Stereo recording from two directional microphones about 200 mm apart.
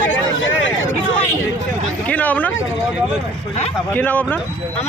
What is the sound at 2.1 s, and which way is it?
Speech, 10° left (ahead or behind).